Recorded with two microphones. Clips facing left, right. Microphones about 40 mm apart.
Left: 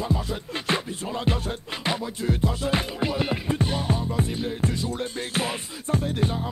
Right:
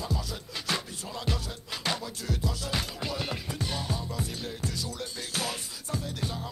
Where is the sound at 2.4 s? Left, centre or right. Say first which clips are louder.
Left 7 dB; left.